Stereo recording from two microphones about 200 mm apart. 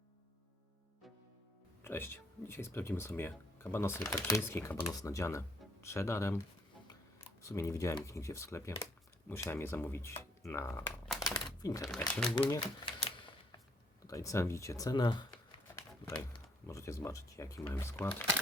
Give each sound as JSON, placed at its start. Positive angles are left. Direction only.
{"t": 1.8, "sound": "speech", "side_deg": 10}
{"t": 11.1, "sound": "crumpling", "side_deg": 0}
{"t": 11.4, "sound": "crumpling", "side_deg": 20}
{"t": 11.8, "sound": "speech", "side_deg": 0}
{"t": 12.3, "sound": "speech", "side_deg": 20}
{"t": 13.0, "sound": "a sound", "side_deg": 25}
{"t": 14.1, "sound": "speech", "side_deg": 15}
{"t": 16.6, "sound": "speech", "side_deg": 15}